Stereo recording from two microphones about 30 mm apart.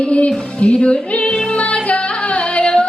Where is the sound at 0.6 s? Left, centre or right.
Left.